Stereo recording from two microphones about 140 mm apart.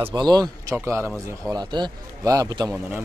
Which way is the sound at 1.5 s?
30° right (ahead or behind).